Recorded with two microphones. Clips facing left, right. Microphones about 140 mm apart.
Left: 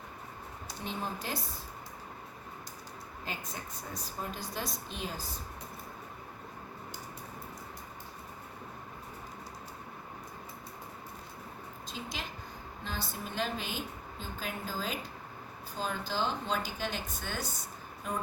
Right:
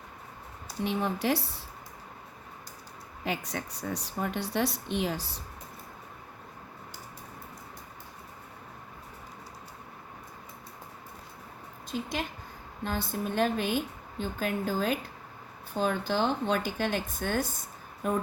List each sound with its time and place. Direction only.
0.9 s speech: 70° right (ahead or behind)
3.2 s speech: 80° right
11.9 s a woman's voice: 55° right (ahead or behind)